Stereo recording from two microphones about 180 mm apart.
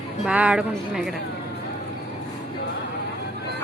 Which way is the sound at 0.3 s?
5° right (ahead or behind).